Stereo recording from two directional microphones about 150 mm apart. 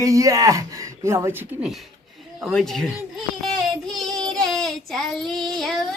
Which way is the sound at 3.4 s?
5° left (ahead or behind).